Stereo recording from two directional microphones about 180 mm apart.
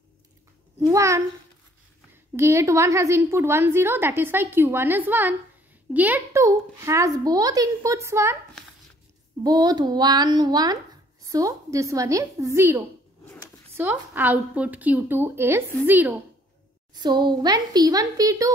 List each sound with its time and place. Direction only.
0.7 s a woman's voice: 15° right (ahead or behind)
2.3 s a woman's voice: 15° right (ahead or behind)
9.4 s a woman's voice: 20° right (ahead or behind)
16.9 s a woman's voice: 25° right (ahead or behind)